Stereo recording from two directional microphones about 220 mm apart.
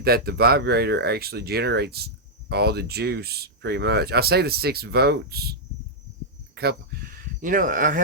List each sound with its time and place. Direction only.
0.0 s speech: 45° right (ahead or behind)